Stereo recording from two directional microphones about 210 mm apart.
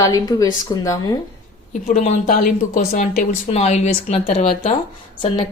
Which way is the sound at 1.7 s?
40° left (ahead or behind).